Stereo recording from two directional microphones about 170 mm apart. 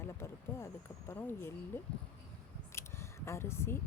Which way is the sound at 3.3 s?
15° left (ahead or behind).